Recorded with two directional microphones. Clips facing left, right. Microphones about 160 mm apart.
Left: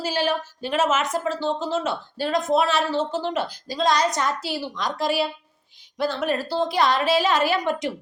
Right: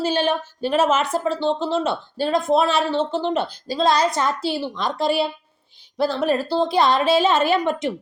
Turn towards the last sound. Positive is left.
turn(degrees=-25)  # may be behind; listen again after turning